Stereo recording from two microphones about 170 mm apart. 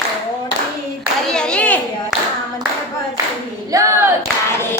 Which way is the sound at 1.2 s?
5° left (ahead or behind).